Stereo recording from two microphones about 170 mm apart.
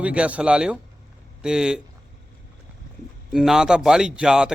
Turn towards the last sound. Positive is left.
turn(degrees=-5)  # may be behind; listen again after turning